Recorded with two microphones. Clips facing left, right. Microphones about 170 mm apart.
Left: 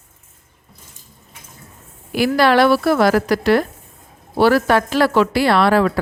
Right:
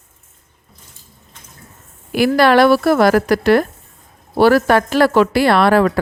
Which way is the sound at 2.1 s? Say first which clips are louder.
Right 2 dB; 55° right (ahead or behind).